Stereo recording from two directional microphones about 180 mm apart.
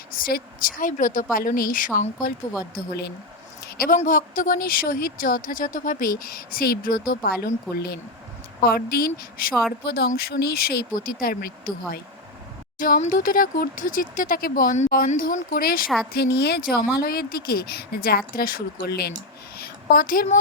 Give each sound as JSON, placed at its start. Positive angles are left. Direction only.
{"t": 0.1, "sound": "speech", "side_deg": 50}
{"t": 2.7, "sound": "speech", "side_deg": 65}
{"t": 3.8, "sound": "speech", "side_deg": 45}
{"t": 12.8, "sound": "a woman's voice", "side_deg": 50}